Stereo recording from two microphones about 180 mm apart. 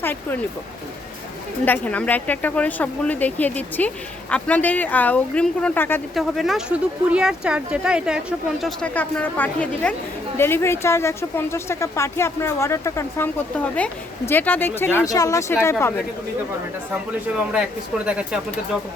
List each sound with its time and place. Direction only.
0.0 s speech: 10° left (ahead or behind)
1.6 s speech: 10° left (ahead or behind)
6.1 s speech: centre (ahead or behind)
17.5 s speech: 5° right (ahead or behind)